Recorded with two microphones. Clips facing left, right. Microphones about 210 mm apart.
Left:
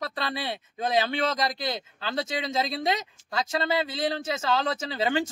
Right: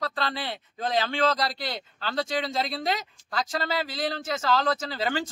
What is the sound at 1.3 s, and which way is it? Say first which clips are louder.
Speech: left 1 dB; 20° left (ahead or behind).